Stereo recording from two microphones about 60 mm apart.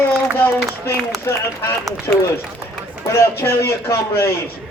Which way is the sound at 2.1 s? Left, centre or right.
Left.